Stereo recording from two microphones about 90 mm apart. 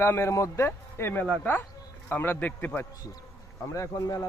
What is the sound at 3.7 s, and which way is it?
Speech, 35° left (ahead or behind).